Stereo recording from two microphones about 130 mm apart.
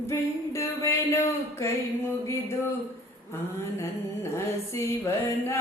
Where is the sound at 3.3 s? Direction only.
20° left (ahead or behind).